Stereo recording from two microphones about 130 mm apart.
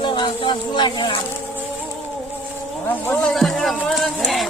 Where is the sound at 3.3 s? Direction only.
Centre (ahead or behind).